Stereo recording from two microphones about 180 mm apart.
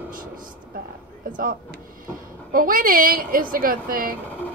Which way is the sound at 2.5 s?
50° right (ahead or behind).